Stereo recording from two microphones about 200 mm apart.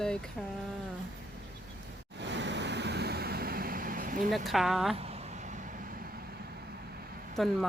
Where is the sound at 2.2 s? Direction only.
60° right (ahead or behind); by 4.3 s 45° right (ahead or behind).